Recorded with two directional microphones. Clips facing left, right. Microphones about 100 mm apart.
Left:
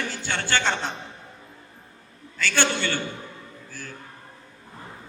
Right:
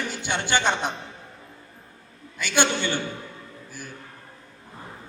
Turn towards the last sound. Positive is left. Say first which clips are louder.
# even
turn(degrees=-15)  # may be behind; listen again after turning